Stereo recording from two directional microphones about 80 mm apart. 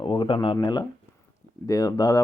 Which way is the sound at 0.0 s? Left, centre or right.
Left.